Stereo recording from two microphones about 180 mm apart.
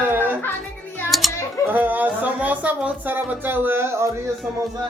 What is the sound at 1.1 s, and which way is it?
Speech, centre (ahead or behind).